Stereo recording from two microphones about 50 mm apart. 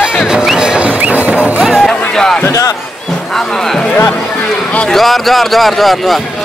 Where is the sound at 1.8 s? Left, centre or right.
Centre.